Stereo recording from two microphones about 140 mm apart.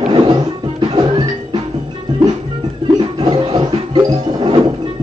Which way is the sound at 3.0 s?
35° right (ahead or behind).